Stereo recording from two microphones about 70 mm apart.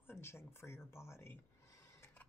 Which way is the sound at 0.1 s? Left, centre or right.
Left.